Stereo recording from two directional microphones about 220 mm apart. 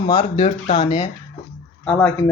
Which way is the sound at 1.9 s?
5° left (ahead or behind).